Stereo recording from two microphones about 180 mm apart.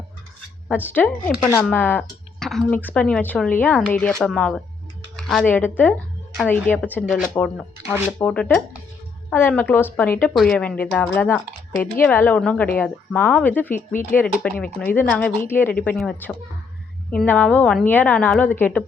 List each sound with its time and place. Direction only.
0.7 s speech: 10° left (ahead or behind)
13.7 s speech: 50° left (ahead or behind)
14.2 s speech: 5° left (ahead or behind)